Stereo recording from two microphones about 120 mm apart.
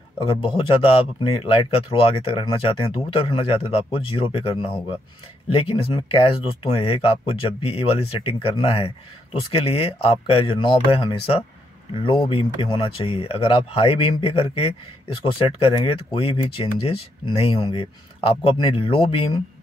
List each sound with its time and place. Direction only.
0.3 s speech: 45° left (ahead or behind)